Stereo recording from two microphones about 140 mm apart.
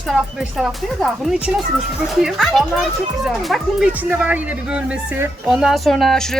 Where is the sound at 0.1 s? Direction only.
5° right (ahead or behind).